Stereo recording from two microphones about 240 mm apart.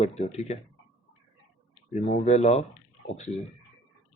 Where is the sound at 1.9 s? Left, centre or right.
Left.